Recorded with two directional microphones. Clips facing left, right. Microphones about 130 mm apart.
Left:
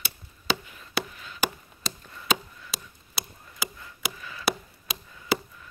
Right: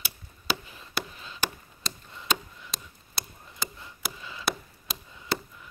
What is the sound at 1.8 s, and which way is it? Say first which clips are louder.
Chop: left 3 dB; 5° left (ahead or behind).